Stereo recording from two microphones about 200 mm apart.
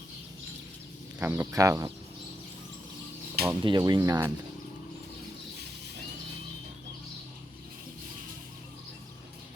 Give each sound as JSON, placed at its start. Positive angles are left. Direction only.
{"t": 1.2, "sound": "speech", "side_deg": -10}
{"t": 3.4, "sound": "speech", "side_deg": -20}